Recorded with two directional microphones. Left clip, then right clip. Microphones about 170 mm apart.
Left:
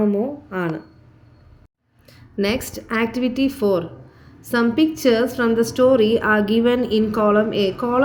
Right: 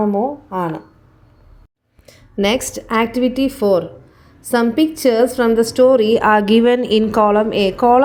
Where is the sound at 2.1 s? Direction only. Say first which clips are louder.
Right 5 dB; 35° right (ahead or behind).